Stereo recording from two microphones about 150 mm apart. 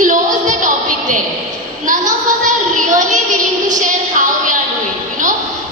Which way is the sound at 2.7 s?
60° right (ahead or behind).